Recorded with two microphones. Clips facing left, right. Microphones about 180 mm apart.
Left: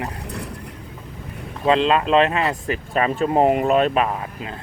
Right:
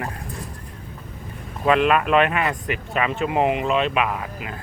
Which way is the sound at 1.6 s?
25° left (ahead or behind).